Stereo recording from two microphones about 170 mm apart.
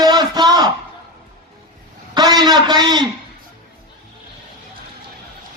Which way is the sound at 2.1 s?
25° right (ahead or behind).